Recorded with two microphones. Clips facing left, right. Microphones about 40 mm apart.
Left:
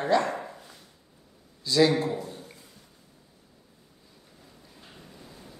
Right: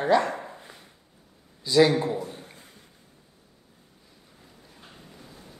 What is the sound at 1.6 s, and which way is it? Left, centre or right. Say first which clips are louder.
Speech: right 3 dB; centre.